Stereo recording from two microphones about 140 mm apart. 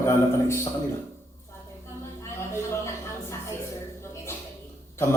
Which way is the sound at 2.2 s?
20° left (ahead or behind).